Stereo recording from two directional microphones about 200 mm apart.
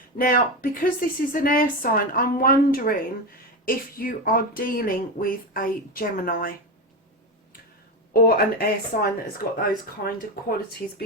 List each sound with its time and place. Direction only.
0.2 s speech: 45° left (ahead or behind)
8.1 s speech: 50° left (ahead or behind)